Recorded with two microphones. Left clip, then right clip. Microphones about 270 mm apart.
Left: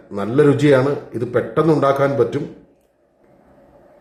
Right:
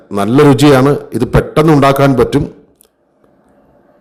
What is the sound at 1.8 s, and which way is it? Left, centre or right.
Speech, right.